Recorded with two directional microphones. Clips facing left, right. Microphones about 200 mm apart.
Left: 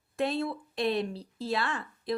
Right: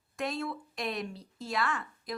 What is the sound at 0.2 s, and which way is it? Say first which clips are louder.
Speech: left 5 dB; 30° left (ahead or behind).